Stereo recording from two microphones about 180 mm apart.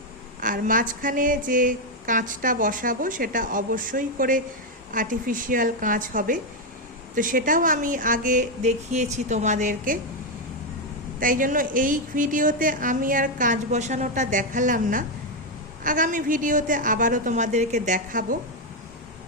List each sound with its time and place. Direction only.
0.3 s speech: 50° right (ahead or behind)
11.2 s speech: 50° right (ahead or behind)